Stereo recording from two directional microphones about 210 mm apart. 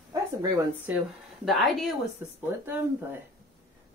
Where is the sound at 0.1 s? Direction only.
15° right (ahead or behind).